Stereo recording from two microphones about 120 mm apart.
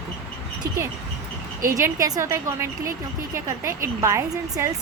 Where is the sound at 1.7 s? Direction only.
25° right (ahead or behind).